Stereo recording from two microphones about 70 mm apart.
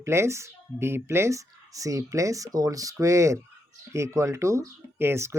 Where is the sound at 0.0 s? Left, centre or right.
Right.